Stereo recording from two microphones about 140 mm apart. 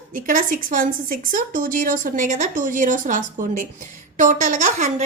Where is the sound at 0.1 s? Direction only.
75° right (ahead or behind).